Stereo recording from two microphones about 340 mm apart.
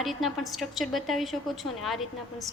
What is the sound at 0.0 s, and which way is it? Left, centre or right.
A woman's voice, centre.